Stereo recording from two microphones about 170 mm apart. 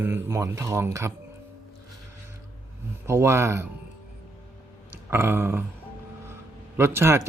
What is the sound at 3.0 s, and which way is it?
Speech, 15° right (ahead or behind).